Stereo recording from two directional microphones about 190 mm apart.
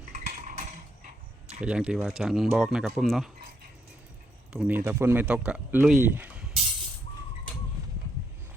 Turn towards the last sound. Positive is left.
turn(degrees=-5)  # may be behind; listen again after turning